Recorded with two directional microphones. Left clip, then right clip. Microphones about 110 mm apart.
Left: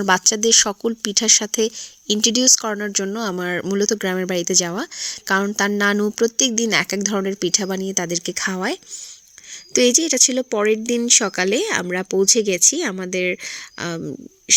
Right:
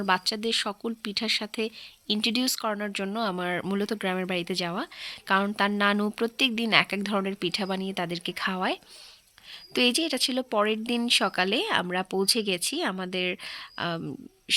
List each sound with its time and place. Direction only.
0.0 s speech: 60° left (ahead or behind)
2.1 s speech: 35° left (ahead or behind)